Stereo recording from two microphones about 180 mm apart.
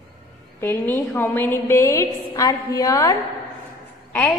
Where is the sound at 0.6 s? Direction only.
10° left (ahead or behind).